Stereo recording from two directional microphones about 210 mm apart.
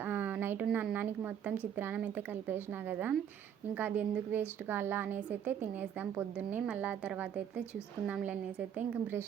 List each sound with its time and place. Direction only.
0.0 s a woman's voice: 10° right (ahead or behind)